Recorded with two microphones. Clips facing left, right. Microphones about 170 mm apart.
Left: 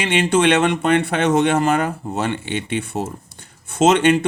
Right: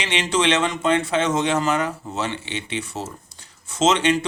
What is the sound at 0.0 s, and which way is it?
Speech, 55° left (ahead or behind).